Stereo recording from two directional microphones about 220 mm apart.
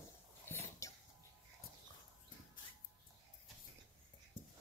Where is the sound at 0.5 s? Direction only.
15° left (ahead or behind).